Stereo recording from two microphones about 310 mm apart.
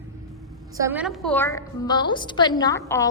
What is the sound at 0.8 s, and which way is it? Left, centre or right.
A woman's voice, centre.